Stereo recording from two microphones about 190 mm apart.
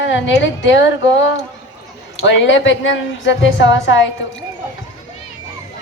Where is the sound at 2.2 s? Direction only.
80° left.